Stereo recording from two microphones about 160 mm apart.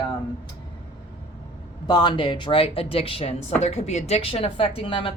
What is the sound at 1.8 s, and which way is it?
Speech, 30° left (ahead or behind).